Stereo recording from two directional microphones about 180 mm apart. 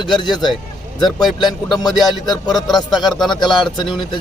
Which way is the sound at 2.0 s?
25° left (ahead or behind).